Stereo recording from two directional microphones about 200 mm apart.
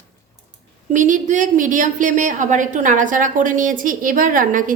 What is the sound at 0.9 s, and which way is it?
A woman's voice, 40° right (ahead or behind).